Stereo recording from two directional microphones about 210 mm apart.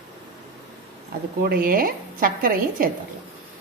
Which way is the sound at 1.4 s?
45° right (ahead or behind).